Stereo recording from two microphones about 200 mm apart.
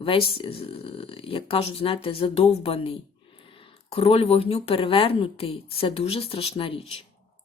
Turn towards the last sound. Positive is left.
turn(degrees=25)  # may be behind; listen again after turning